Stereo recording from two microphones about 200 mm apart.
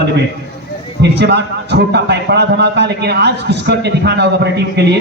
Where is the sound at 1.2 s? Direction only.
55° right (ahead or behind).